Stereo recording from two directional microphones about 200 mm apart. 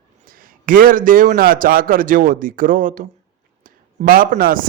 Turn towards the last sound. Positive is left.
turn(degrees=-45)  # may be behind; listen again after turning